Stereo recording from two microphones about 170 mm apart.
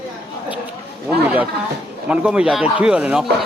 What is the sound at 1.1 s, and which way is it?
A man's voice, 5° right (ahead or behind).